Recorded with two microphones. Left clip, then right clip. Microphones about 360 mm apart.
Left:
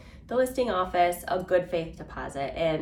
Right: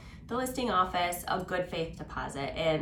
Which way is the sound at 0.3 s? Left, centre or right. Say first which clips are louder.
Left 6 dB; centre.